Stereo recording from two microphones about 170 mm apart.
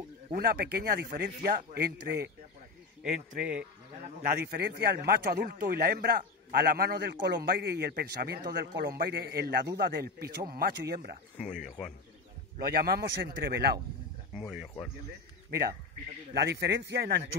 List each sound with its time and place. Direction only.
0.3 s a man's voice: 60° right (ahead or behind)
4.2 s a man's voice: 60° right (ahead or behind)
11.5 s speech: centre (ahead or behind)
12.7 s a man's voice: 65° right (ahead or behind)
14.4 s speech: 5° right (ahead or behind)
16.3 s a man's voice: 75° right (ahead or behind)